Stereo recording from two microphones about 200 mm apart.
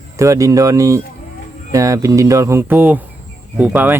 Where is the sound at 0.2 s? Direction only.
15° right (ahead or behind).